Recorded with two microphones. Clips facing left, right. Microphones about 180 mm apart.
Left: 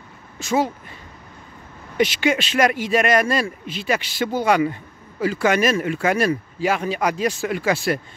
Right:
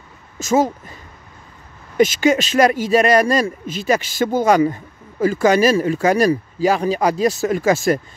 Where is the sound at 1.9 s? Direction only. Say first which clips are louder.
Right 5 dB; 45° right (ahead or behind).